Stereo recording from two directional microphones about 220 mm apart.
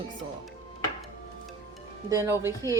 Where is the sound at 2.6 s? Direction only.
15° left (ahead or behind).